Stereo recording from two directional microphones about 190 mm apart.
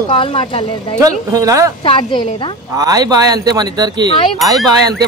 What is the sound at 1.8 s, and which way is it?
Speech, 25° left (ahead or behind).